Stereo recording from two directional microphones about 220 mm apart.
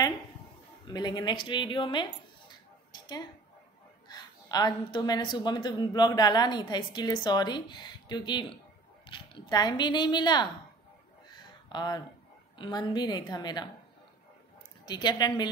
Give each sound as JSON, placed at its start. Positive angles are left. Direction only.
{"t": 0.8, "sound": "speech", "side_deg": 20}
{"t": 11.7, "sound": "speech", "side_deg": 20}
{"t": 14.9, "sound": "speech", "side_deg": 20}